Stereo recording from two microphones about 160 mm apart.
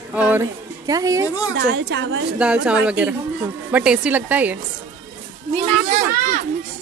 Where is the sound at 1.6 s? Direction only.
90° right.